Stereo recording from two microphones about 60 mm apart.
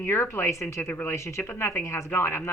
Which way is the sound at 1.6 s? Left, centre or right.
Left.